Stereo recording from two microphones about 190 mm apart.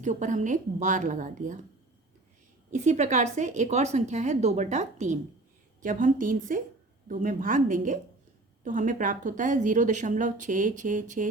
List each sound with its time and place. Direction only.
0.0 s a woman's voice: 40° right (ahead or behind)
2.7 s a woman's voice: 40° right (ahead or behind)